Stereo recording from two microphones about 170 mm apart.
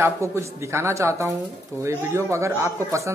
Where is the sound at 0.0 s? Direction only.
15° right (ahead or behind).